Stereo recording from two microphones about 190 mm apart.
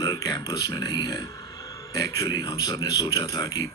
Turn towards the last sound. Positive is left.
turn(degrees=20)  # may be behind; listen again after turning